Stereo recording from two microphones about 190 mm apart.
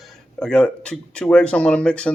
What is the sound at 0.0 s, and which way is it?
Speech, 5° left (ahead or behind).